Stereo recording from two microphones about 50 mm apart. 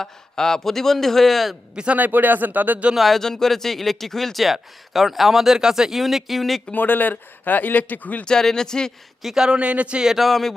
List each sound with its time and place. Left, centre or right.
0.0 s speech: centre
1.7 s a man's voice: centre
2.0 s speech: right
2.9 s speech: centre
6.7 s speech: left
8.2 s speech: centre
9.2 s a man's voice: centre
9.6 s a man's voice: right
10.0 s speech: centre